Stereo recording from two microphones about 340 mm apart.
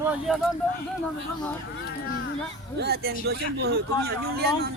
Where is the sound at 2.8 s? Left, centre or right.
Right.